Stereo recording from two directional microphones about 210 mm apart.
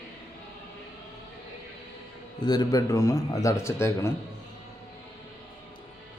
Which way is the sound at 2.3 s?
20° left (ahead or behind).